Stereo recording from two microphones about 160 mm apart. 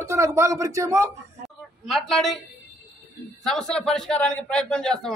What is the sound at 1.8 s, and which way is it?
Speech, centre (ahead or behind).